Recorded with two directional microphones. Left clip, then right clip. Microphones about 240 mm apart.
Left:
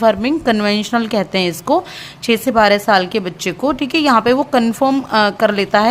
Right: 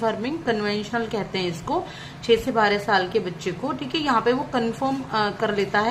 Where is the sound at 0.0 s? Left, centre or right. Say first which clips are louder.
Left 11 dB; left.